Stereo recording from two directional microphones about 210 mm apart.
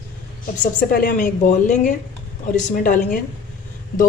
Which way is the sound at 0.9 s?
40° left (ahead or behind).